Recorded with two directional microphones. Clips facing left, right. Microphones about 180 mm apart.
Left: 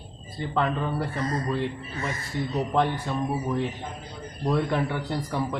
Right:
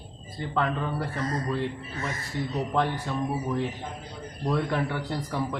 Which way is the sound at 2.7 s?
20° left (ahead or behind).